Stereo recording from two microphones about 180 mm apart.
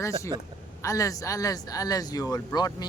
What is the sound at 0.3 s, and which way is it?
Speech, 25° right (ahead or behind).